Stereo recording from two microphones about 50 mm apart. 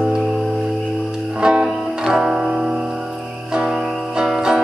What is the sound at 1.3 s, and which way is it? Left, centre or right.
Music, centre.